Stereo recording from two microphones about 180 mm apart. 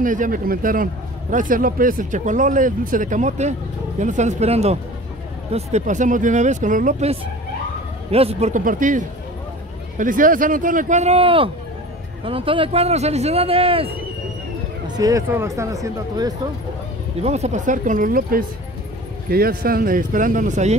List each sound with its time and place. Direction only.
0.0 s speech: 45° right (ahead or behind); by 13.9 s 30° right (ahead or behind)
14.9 s speech: 20° right (ahead or behind)
17.2 s speech: 40° right (ahead or behind)